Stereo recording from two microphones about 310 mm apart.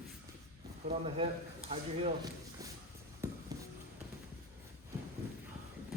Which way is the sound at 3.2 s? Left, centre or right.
Centre.